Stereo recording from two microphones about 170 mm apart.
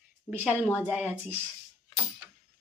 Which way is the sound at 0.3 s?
10° right (ahead or behind).